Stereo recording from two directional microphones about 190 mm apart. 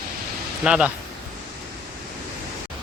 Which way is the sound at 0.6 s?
5° right (ahead or behind).